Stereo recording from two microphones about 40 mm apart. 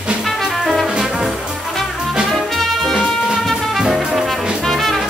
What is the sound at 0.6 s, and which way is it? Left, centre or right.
Music, centre.